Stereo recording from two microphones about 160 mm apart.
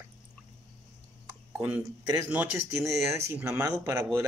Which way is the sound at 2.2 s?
15° right (ahead or behind).